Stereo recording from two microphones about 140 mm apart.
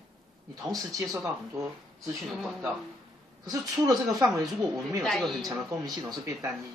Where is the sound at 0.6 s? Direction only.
25° right (ahead or behind).